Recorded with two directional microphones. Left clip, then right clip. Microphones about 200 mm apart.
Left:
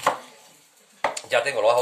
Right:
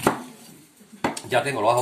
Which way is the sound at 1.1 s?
45° left (ahead or behind).